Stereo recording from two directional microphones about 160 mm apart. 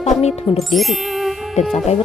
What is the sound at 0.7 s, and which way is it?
Speech, centre (ahead or behind).